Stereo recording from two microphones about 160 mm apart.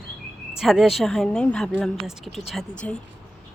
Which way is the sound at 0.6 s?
Centre (ahead or behind).